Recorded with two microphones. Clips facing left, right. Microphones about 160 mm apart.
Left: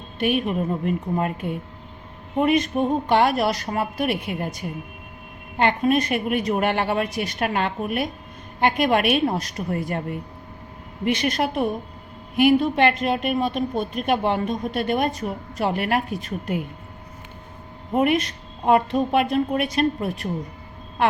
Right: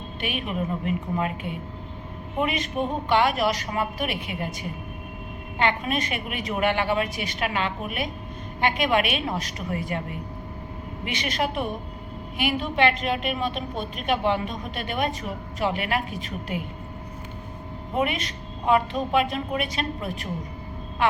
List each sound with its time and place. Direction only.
0.2 s a woman's voice: 45° left (ahead or behind)
5.5 s a woman's voice: 45° left (ahead or behind)
17.9 s a woman's voice: 45° left (ahead or behind)